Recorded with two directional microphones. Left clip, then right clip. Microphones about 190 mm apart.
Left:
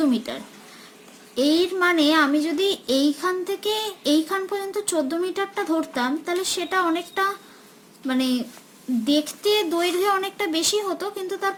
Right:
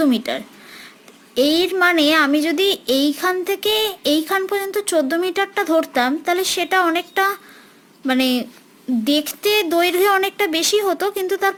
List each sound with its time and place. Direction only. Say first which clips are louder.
0.0 s child singing: right 5 dB; 40° right (ahead or behind)